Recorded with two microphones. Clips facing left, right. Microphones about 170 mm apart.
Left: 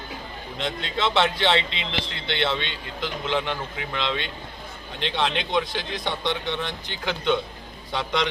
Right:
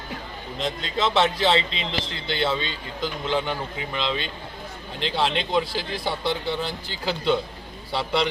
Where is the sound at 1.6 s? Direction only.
35° right (ahead or behind).